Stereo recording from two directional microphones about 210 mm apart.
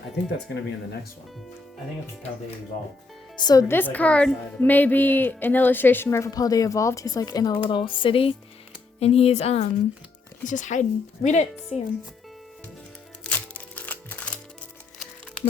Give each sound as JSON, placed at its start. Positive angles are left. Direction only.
{"t": 3.3, "sound": "a woman's voice", "side_deg": 20}
{"t": 13.2, "sound": "music", "side_deg": 5}